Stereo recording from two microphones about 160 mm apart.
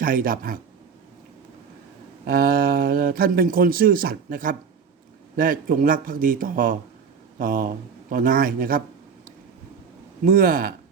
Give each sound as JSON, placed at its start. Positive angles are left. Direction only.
{"t": 0.0, "sound": "speech", "side_deg": -60}
{"t": 2.2, "sound": "speech", "side_deg": -70}
{"t": 10.2, "sound": "speech", "side_deg": -60}